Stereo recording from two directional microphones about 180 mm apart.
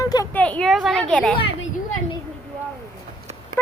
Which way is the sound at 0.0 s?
20° left (ahead or behind).